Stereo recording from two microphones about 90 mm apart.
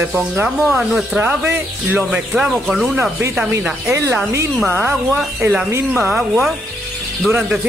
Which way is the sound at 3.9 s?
30° right (ahead or behind).